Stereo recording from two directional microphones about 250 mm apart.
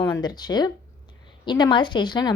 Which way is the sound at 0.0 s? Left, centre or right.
Centre.